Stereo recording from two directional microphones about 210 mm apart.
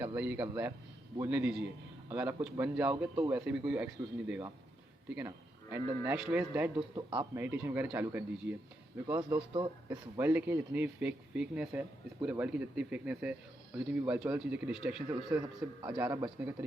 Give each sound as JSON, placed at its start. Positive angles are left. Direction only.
{"t": 0.0, "sound": "speech", "side_deg": -5}
{"t": 6.7, "sound": "speech", "side_deg": -20}